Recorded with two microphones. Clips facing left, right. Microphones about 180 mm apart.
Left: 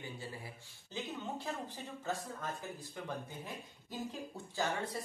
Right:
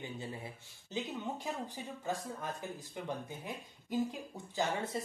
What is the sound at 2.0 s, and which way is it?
Speech, 15° right (ahead or behind).